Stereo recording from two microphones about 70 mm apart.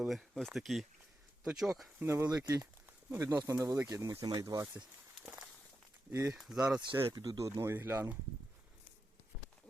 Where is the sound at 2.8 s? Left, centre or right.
Right.